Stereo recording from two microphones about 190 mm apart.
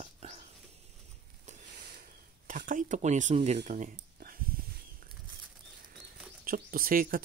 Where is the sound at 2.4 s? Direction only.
45° right (ahead or behind).